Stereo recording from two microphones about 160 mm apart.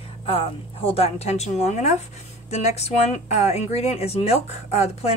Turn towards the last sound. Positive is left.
turn(degrees=40)  # may be behind; listen again after turning